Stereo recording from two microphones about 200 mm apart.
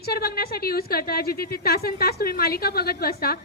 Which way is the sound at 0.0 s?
50° left (ahead or behind).